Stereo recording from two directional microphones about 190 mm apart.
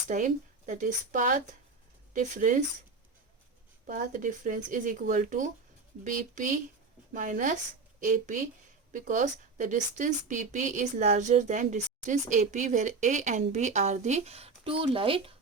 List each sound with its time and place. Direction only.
0.1 s a woman's voice: 40° right (ahead or behind)
3.8 s a woman's voice: 45° right (ahead or behind)